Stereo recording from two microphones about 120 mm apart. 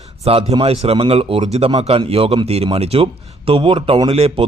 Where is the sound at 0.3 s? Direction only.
55° right (ahead or behind).